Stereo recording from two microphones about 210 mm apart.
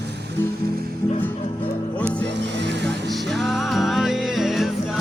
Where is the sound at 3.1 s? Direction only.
Centre (ahead or behind).